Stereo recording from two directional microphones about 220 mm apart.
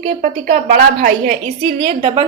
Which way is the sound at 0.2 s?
40° right (ahead or behind).